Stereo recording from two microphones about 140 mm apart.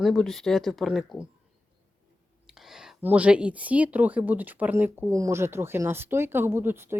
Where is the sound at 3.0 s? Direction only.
10° right (ahead or behind).